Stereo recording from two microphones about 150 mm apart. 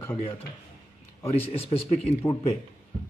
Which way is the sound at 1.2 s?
40° left (ahead or behind).